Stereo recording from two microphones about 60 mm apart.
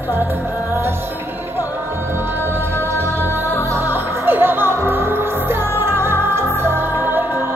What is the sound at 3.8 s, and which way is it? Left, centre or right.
Music, right.